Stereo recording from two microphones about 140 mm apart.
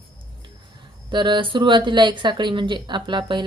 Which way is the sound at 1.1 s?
35° right (ahead or behind).